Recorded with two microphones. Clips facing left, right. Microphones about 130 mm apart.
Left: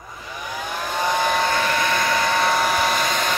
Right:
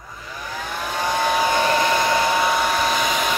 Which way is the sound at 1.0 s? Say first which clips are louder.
Even; 15° left (ahead or behind).